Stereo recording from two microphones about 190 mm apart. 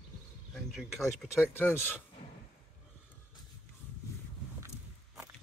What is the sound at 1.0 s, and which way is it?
Speech, 10° left (ahead or behind).